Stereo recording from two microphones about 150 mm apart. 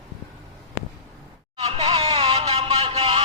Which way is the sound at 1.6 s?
45° right (ahead or behind).